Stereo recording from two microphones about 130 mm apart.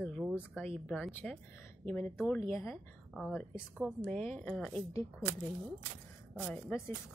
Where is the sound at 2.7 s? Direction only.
5° right (ahead or behind).